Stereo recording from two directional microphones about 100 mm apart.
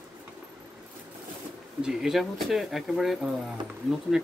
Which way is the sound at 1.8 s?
5° right (ahead or behind).